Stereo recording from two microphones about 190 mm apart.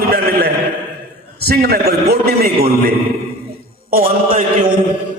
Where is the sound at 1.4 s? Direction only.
55° right (ahead or behind).